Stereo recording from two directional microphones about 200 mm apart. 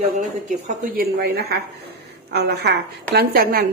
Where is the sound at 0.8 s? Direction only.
45° right (ahead or behind).